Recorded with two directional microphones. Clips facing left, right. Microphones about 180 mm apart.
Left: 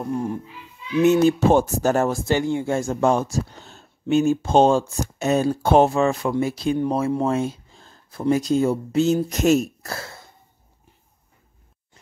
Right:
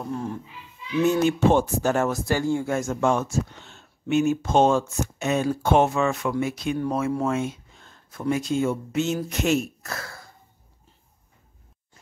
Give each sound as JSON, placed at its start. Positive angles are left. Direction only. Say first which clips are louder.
{"t": 0.1, "sound": "speech", "louder": "left 5 dB", "side_deg": 15}
{"t": 1.2, "sound": "speech", "louder": "left 3 dB", "side_deg": 40}